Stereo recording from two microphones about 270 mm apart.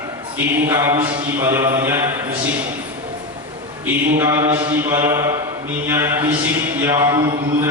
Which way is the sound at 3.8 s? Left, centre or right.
Centre.